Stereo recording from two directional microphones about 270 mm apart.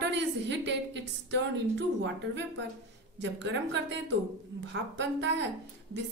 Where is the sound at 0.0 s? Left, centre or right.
Right.